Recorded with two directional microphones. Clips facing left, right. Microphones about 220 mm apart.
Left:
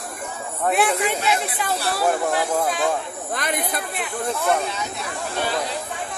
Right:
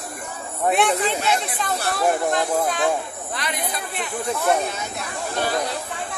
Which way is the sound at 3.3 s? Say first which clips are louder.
Left 4 dB; 50° left (ahead or behind).